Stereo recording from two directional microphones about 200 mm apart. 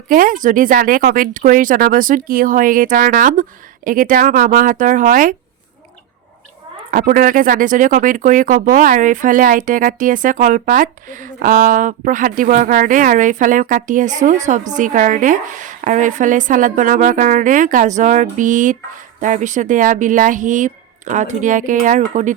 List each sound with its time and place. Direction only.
0.1 s speech: 45° right (ahead or behind)
6.9 s speech: 45° right (ahead or behind)